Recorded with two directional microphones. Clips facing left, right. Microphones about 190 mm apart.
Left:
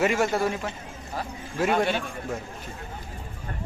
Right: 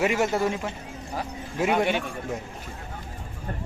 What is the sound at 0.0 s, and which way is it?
A man's voice, 10° right (ahead or behind).